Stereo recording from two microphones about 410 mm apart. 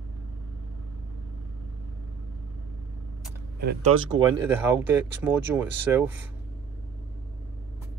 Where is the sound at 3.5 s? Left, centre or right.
Right.